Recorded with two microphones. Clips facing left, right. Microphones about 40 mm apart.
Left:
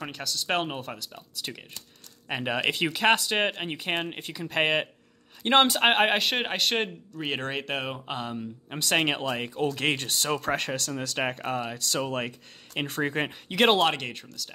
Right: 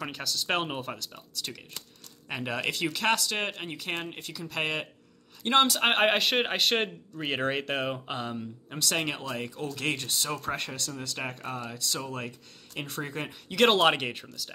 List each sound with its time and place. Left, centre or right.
0.0 s speech: centre
2.2 s speech: left
5.9 s speech: centre
8.6 s speech: left
10.0 s speech: left
13.7 s speech: centre